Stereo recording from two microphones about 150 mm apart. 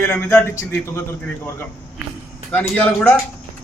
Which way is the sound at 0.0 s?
15° left (ahead or behind).